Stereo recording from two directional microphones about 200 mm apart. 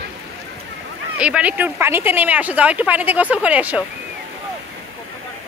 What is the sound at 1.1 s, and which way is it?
Speech, 5° right (ahead or behind).